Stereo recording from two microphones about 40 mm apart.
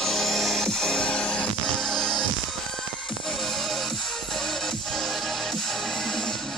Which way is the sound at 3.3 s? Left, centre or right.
Centre.